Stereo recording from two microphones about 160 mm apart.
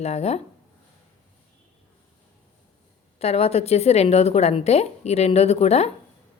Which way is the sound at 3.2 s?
40° left (ahead or behind).